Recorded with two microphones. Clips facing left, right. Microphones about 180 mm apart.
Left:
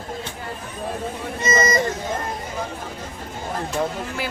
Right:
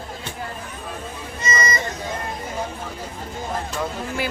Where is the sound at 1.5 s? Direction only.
45° left (ahead or behind).